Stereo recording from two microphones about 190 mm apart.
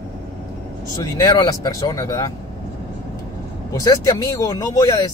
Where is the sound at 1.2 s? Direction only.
20° left (ahead or behind).